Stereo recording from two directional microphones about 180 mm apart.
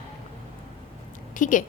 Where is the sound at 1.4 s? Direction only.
45° left (ahead or behind).